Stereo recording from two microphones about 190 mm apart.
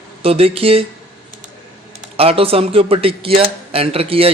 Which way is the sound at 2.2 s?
30° right (ahead or behind).